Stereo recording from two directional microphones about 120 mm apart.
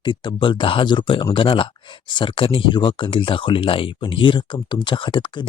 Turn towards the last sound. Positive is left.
turn(degrees=40)  # may be behind; listen again after turning